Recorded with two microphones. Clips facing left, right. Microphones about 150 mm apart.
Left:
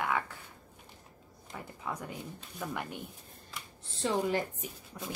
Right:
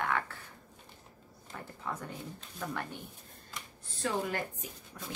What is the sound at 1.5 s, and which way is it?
Speech, 10° left (ahead or behind).